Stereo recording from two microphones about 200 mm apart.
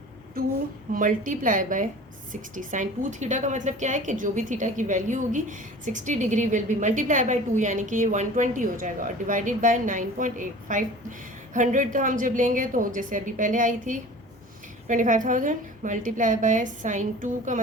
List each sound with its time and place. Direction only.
0.9 s a woman's voice: 40° right (ahead or behind)